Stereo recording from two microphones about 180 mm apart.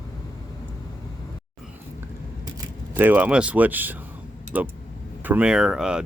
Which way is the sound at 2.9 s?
10° right (ahead or behind).